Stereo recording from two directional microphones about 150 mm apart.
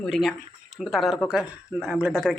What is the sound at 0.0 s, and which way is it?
Speech, 5° left (ahead or behind).